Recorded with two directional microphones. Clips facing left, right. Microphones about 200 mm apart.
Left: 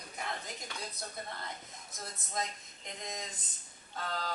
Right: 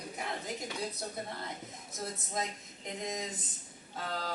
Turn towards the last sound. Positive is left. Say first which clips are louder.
# right 1 dB
turn(degrees=-10)  # may be behind; listen again after turning